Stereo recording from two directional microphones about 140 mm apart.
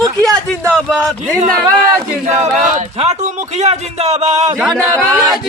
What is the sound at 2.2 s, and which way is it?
A man's voice, 55° right (ahead or behind).